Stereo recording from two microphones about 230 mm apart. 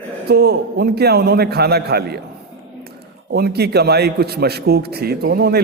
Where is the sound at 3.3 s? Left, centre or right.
Right.